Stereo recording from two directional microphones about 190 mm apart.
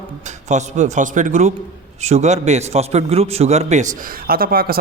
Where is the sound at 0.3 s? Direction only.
40° right (ahead or behind).